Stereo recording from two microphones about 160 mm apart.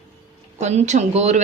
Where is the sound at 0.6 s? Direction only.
45° right (ahead or behind).